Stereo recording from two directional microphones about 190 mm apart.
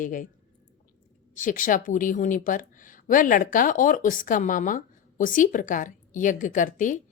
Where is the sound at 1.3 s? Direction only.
45° left (ahead or behind).